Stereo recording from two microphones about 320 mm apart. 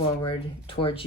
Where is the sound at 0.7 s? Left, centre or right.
Centre.